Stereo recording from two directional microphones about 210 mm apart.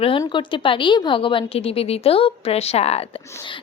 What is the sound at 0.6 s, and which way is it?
A woman's voice, 25° left (ahead or behind).